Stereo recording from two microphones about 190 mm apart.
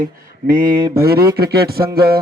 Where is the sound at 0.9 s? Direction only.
55° right (ahead or behind).